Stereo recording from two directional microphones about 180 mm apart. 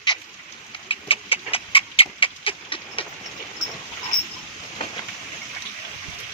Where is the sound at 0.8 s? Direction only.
30° left (ahead or behind).